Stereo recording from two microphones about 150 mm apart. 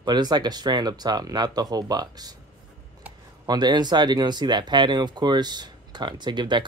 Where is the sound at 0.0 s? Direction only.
30° right (ahead or behind).